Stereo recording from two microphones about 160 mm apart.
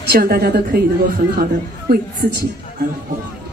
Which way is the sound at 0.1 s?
80° right.